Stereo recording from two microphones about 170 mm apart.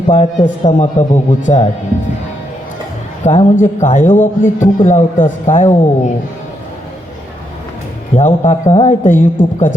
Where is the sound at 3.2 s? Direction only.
45° left (ahead or behind).